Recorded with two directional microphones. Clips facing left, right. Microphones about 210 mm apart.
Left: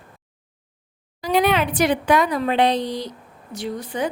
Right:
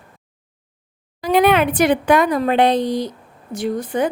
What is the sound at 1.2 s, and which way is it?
A woman's voice, 55° right (ahead or behind).